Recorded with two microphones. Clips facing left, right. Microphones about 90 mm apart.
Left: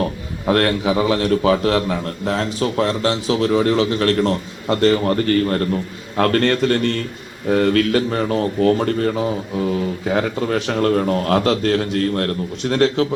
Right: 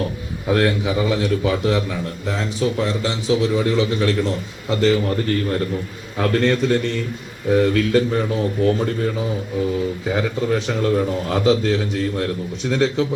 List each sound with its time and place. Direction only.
0.4 s a man's voice: 60° left (ahead or behind)